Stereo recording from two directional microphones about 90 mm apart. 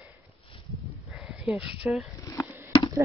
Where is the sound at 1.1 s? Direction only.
10° right (ahead or behind).